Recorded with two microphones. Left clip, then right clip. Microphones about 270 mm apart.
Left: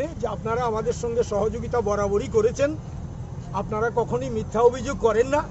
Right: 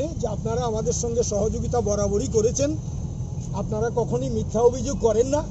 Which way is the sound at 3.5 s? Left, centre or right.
Left.